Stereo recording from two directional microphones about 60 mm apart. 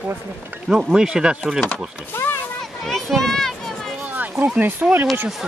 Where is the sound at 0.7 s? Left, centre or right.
Centre.